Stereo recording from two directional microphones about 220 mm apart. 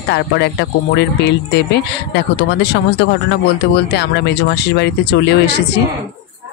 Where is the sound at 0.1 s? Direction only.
50° left (ahead or behind).